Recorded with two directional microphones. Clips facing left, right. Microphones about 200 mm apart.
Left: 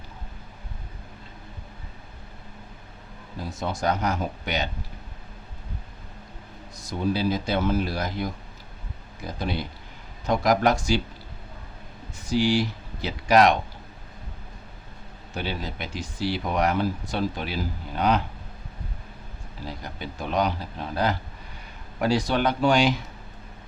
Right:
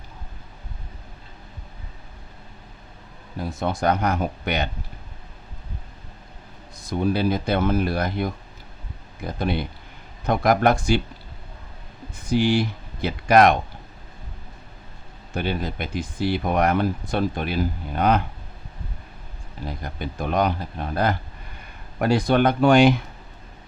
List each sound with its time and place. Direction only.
3.5 s speech: 55° right (ahead or behind)
6.7 s speech: 55° right (ahead or behind)
12.1 s speech: 55° right (ahead or behind)
15.4 s speech: 55° right (ahead or behind)
19.6 s speech: 55° right (ahead or behind)